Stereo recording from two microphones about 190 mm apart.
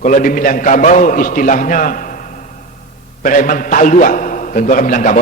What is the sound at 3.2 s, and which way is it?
A man's voice, 45° left (ahead or behind).